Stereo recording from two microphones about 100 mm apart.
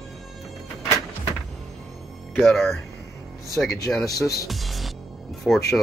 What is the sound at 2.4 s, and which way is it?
Speech, centre (ahead or behind).